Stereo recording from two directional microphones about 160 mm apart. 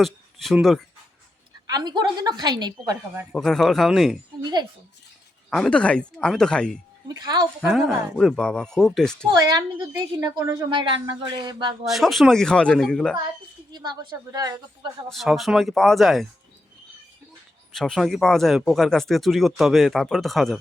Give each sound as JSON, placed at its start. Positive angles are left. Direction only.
{"t": 0.0, "sound": "speech", "side_deg": 0}
{"t": 1.6, "sound": "a woman's voice", "side_deg": -25}
{"t": 3.3, "sound": "speech", "side_deg": 5}
{"t": 5.5, "sound": "speech", "side_deg": 5}
{"t": 7.1, "sound": "a woman's voice", "side_deg": -25}
{"t": 7.6, "sound": "speech", "side_deg": 0}
{"t": 9.3, "sound": "a woman's voice", "side_deg": -25}
{"t": 11.9, "sound": "speech", "side_deg": 0}
{"t": 13.7, "sound": "a woman's voice", "side_deg": -25}
{"t": 15.1, "sound": "speech", "side_deg": 0}
{"t": 17.7, "sound": "speech", "side_deg": 0}